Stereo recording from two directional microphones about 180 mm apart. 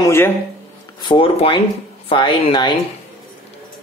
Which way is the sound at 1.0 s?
30° left (ahead or behind).